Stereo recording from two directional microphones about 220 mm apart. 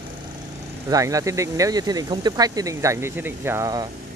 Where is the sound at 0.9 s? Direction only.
15° right (ahead or behind).